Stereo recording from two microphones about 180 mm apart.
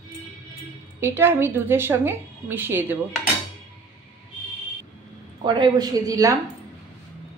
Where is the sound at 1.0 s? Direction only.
15° right (ahead or behind).